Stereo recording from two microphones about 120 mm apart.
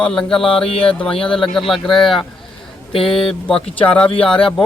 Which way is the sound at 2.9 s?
50° left (ahead or behind).